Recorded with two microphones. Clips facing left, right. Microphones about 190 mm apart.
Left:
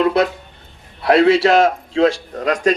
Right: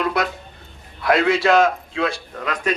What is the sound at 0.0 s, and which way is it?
A man's voice, 30° left (ahead or behind).